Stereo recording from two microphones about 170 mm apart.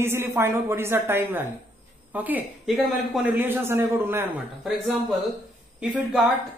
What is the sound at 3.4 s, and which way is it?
A man's voice, 15° right (ahead or behind).